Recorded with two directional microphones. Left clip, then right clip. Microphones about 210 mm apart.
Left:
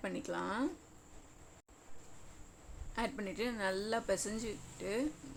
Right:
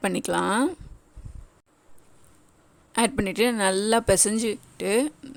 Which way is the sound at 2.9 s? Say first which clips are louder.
Right 15 dB; 55° right (ahead or behind).